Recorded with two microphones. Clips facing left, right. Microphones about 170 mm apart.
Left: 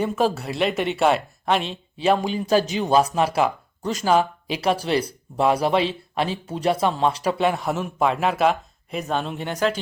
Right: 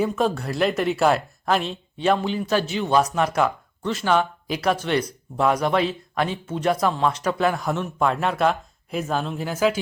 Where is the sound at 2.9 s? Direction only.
30° left (ahead or behind).